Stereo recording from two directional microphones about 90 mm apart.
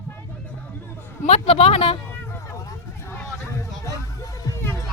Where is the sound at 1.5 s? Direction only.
90° left.